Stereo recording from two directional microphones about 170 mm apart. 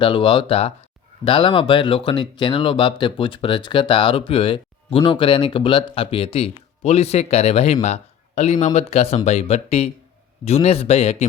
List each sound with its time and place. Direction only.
0.0 s speech: 30° left (ahead or behind)